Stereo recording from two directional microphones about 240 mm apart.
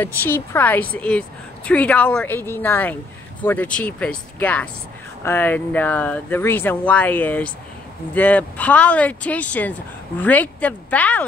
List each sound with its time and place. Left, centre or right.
0.0 s a woman's voice: centre